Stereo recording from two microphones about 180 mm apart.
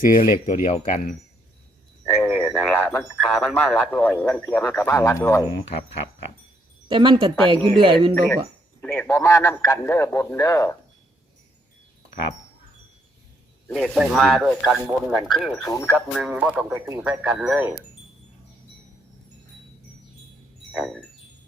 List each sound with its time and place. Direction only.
0.0 s speech: 50° left (ahead or behind)
2.2 s a sound: 5° left (ahead or behind)
2.6 s speech: 5° left (ahead or behind)
6.8 s speech: 25° right (ahead or behind)
8.8 s speech: 10° left (ahead or behind)
13.7 s speech: centre (ahead or behind); by 17.0 s 15° right (ahead or behind)
17.0 s speech: 5° right (ahead or behind)
20.7 s wind chime: centre (ahead or behind)